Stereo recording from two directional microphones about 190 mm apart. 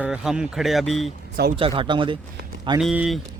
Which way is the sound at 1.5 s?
30° right (ahead or behind).